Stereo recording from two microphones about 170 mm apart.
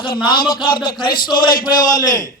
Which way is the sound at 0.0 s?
30° left (ahead or behind).